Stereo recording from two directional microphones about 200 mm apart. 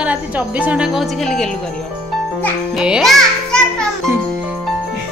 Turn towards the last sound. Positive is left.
turn(degrees=0)  # may be behind; listen again after turning